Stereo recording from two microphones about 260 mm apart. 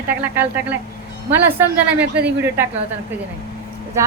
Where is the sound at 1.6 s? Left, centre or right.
Centre.